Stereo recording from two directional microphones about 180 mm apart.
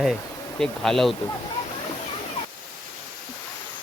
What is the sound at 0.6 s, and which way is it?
Speech, 5° left (ahead or behind).